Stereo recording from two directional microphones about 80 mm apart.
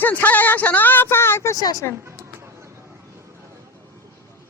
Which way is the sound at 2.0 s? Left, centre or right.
Right.